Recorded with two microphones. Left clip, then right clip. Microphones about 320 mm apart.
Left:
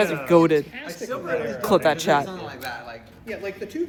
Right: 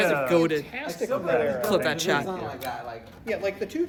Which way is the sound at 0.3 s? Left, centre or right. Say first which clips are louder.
Left 5 dB; centre.